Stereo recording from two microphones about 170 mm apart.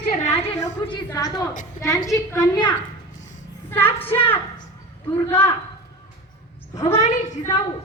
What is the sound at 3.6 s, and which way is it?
Speech, 10° left (ahead or behind).